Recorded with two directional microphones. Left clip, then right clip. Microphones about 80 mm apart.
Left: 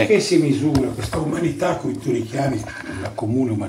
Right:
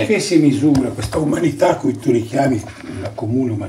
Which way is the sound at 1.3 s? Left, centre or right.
Right.